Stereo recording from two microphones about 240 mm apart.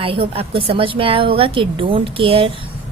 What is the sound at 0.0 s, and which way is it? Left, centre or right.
A woman's voice, right.